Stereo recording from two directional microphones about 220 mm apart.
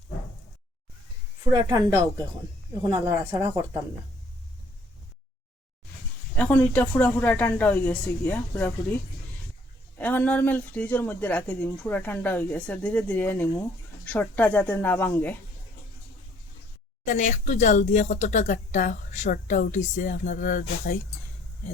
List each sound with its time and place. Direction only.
1.5 s speech: 15° right (ahead or behind)
3.3 s speech: 10° right (ahead or behind)
6.3 s speech: 5° left (ahead or behind)
10.0 s speech: 5° left (ahead or behind)
17.1 s speech: 35° left (ahead or behind)